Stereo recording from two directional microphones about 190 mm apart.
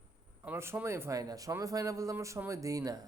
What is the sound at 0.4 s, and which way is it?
Speech, 10° right (ahead or behind).